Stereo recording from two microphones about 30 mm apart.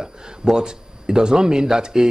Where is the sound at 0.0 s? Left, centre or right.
Right.